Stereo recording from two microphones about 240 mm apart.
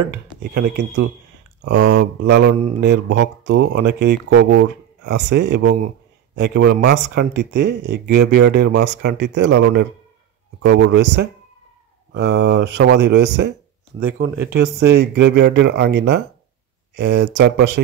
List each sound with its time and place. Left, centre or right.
0.1 s speech: right
13.9 s speech: centre
14.4 s speech: right